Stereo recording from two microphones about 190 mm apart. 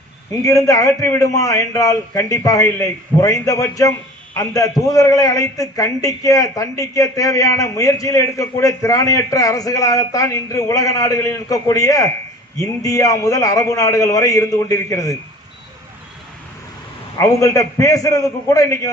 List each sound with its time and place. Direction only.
0.4 s a man's voice: 20° left (ahead or behind)
17.2 s a man's voice: 15° left (ahead or behind)